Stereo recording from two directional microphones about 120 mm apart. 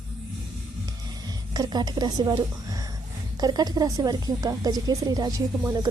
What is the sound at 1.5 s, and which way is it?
Speech, 35° right (ahead or behind).